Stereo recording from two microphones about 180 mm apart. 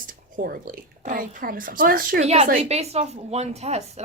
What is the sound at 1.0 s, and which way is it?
A woman's voice, 50° right (ahead or behind).